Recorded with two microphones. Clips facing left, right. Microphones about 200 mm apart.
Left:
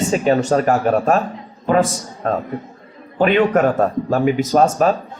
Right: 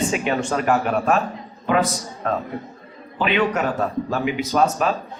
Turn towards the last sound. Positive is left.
turn(degrees=45)  # may be behind; listen again after turning